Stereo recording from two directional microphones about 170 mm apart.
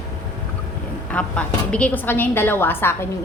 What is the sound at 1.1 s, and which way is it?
A woman's voice, 5° left (ahead or behind).